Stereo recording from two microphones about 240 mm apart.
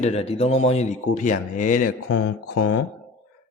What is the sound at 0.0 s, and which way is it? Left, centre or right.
Speech, left.